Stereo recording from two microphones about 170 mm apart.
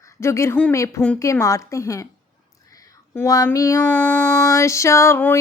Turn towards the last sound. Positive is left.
turn(degrees=15)  # may be behind; listen again after turning